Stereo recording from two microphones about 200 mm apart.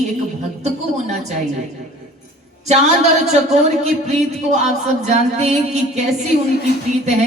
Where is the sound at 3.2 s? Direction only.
35° right (ahead or behind).